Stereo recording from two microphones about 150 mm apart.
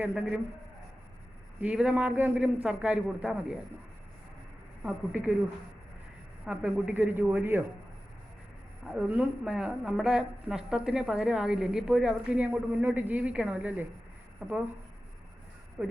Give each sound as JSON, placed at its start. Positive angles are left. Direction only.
{"t": 0.0, "sound": "a man's voice", "side_deg": -10}
{"t": 1.6, "sound": "a man's voice", "side_deg": -5}
{"t": 4.8, "sound": "a man's voice", "side_deg": -10}
{"t": 6.4, "sound": "a man's voice", "side_deg": -5}
{"t": 8.9, "sound": "a woman's voice", "side_deg": -5}
{"t": 15.8, "sound": "a man's voice", "side_deg": -10}